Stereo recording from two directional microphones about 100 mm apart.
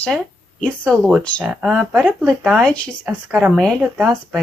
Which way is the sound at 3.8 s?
10° right (ahead or behind).